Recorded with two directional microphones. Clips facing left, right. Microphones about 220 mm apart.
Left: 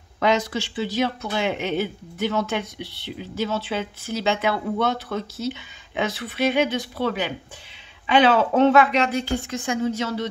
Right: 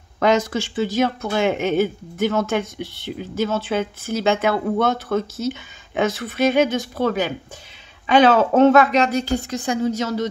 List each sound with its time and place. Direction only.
0.2 s a woman's voice: 45° right (ahead or behind)